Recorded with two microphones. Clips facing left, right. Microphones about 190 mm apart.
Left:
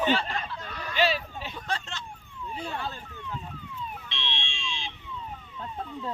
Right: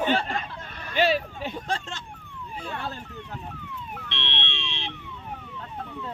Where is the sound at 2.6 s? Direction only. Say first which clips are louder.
Right 1 dB; 65° right (ahead or behind).